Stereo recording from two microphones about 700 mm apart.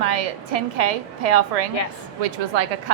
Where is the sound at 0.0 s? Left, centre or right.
Right.